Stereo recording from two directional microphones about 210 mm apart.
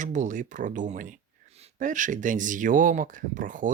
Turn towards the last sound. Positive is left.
turn(degrees=-40)  # may be behind; listen again after turning